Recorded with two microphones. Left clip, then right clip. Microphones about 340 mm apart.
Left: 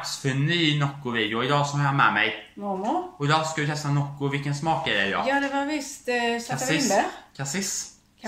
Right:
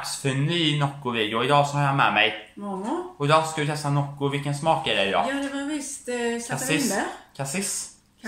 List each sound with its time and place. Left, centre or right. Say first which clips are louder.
0.0 s speech: right 1 dB; centre
5.2 s speech: left 3 dB; centre
6.5 s speech: left 4 dB; centre